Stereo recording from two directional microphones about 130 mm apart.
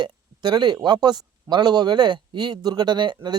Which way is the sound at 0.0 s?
35° right (ahead or behind).